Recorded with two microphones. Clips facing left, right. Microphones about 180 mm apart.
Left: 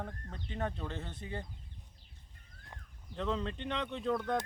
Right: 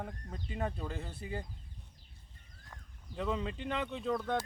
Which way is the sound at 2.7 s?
15° left (ahead or behind).